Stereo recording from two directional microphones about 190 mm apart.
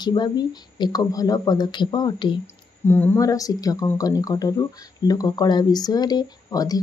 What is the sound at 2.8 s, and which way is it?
Speech, 10° left (ahead or behind).